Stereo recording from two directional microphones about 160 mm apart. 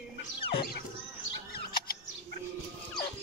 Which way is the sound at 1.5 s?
70° left (ahead or behind).